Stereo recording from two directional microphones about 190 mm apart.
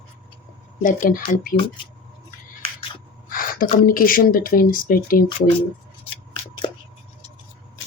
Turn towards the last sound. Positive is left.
turn(degrees=25)  # may be behind; listen again after turning